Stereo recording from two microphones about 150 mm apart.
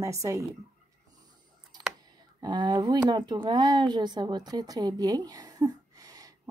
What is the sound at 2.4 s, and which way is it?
Speech, 30° right (ahead or behind).